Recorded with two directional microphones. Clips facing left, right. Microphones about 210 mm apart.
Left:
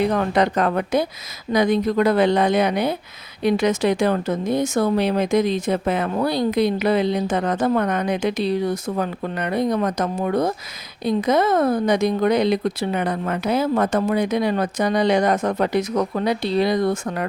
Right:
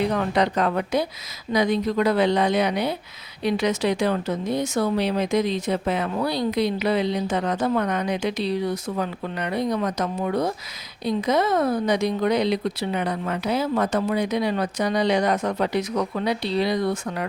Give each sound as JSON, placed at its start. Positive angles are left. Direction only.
{"t": 0.1, "sound": "speech", "side_deg": 50}